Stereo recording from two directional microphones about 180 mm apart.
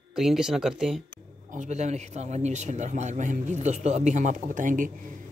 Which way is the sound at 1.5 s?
40° right (ahead or behind).